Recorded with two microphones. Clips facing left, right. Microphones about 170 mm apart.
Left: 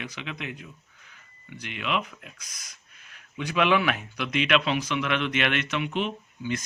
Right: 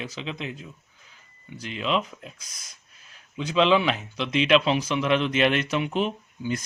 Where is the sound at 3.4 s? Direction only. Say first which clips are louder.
Right 3 dB; 25° right (ahead or behind).